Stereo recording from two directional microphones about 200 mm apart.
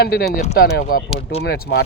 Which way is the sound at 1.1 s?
30° left (ahead or behind).